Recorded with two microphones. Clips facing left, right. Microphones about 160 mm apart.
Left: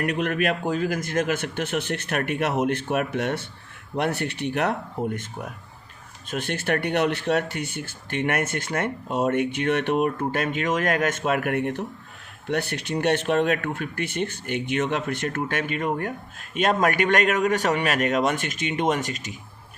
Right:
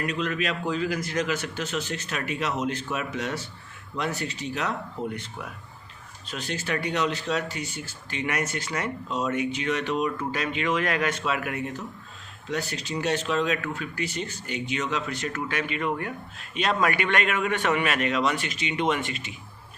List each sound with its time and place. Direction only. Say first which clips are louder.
0.0 s a man's voice: left 4 dB; 60° left (ahead or behind); by 19.3 s 40° left (ahead or behind)